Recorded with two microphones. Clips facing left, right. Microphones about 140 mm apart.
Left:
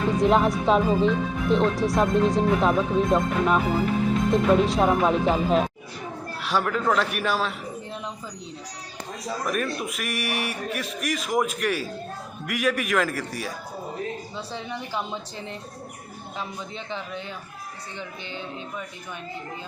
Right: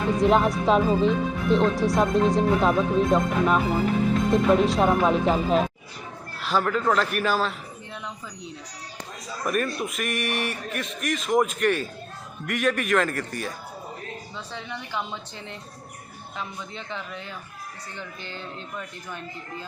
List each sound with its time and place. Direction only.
0.2 s speech: centre (ahead or behind)
9.5 s speech: centre (ahead or behind)
14.7 s speech: 10° left (ahead or behind)
17.9 s speech: 15° left (ahead or behind)